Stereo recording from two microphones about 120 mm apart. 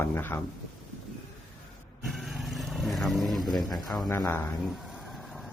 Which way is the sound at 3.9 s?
15° left (ahead or behind).